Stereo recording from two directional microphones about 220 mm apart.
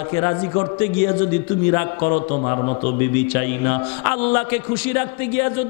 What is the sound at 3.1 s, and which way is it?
A man's voice, 10° left (ahead or behind).